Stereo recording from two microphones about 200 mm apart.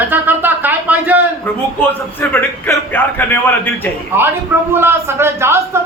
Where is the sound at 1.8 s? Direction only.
10° left (ahead or behind).